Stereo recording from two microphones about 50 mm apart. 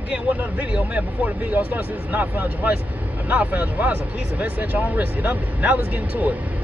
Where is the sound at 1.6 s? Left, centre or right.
Right.